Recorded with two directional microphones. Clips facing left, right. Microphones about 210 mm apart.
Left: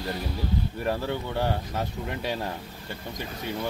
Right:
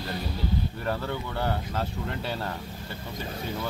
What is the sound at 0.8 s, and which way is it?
Speech, 10° left (ahead or behind).